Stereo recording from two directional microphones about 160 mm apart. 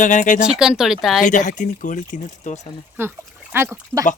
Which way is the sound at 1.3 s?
50° left (ahead or behind).